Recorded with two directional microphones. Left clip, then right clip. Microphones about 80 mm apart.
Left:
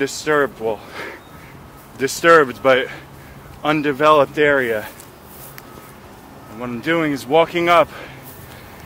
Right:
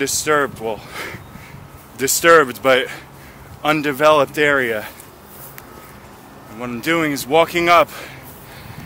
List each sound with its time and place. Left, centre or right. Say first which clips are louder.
0.0 s speech: even; right
6.6 s speech: right 1 dB; right